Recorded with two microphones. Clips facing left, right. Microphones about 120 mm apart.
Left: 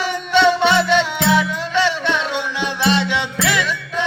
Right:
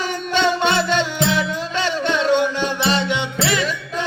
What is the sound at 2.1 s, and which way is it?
Music, 40° right (ahead or behind).